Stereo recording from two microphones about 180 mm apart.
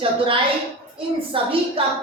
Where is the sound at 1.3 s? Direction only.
30° right (ahead or behind).